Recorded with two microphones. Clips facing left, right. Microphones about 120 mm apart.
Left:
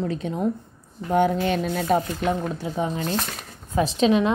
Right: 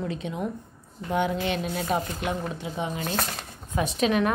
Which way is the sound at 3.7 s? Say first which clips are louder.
Left 4 dB; 30° left (ahead or behind).